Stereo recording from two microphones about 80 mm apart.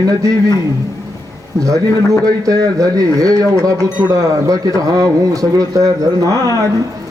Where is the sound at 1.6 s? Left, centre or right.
Right.